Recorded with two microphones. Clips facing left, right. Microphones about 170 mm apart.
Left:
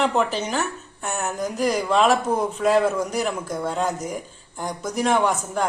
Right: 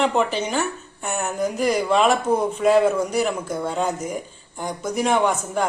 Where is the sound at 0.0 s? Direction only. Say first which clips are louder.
Right 1 dB; centre (ahead or behind).